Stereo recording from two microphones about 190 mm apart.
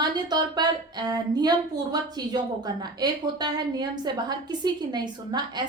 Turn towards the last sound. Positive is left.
turn(degrees=-20)  # may be behind; listen again after turning